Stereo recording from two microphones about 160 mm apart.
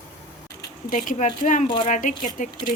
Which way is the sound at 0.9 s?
55° left (ahead or behind).